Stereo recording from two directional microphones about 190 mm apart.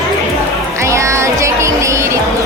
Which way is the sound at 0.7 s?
15° right (ahead or behind).